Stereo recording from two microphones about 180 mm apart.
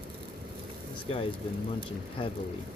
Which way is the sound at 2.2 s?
25° left (ahead or behind).